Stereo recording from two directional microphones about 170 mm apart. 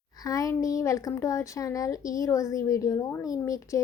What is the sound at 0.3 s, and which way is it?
A woman's voice, 20° left (ahead or behind).